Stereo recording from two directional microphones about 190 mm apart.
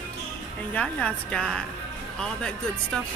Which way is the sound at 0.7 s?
5° left (ahead or behind).